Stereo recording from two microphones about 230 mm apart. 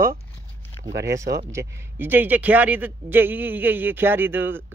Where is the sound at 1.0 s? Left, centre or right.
Centre.